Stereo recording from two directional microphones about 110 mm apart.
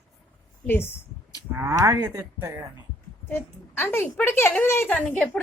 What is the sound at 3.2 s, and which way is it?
A woman's voice, 20° left (ahead or behind).